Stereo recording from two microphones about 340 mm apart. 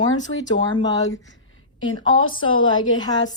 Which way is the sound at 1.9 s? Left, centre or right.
Left.